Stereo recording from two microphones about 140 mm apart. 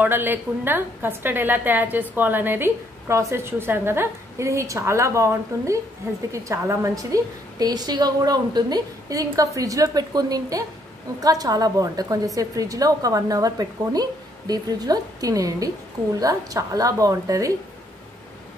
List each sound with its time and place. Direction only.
0.0 s a woman's voice: 15° right (ahead or behind)